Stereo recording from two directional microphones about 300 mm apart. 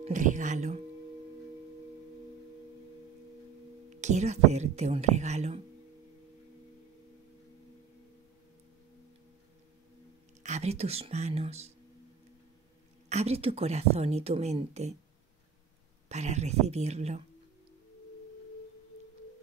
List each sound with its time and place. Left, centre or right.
0.0 s a woman's voice: right
3.9 s a woman's voice: right
10.4 s a woman's voice: right
13.1 s a woman's voice: right
16.1 s a woman's voice: right